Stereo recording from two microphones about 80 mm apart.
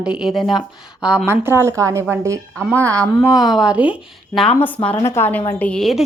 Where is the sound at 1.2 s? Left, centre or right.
Right.